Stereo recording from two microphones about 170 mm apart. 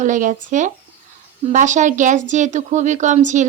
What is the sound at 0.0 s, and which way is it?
Speech, 50° right (ahead or behind).